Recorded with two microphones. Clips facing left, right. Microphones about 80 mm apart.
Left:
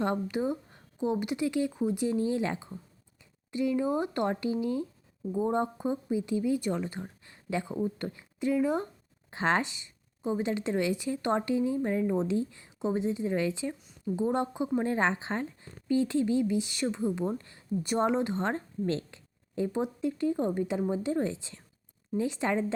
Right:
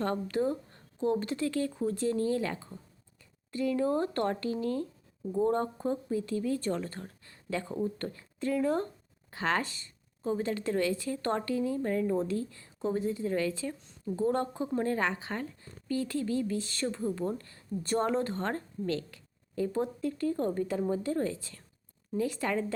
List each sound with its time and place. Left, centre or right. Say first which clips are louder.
0.0 s speech: left 1 dB; centre
9.3 s speech: left 3 dB; left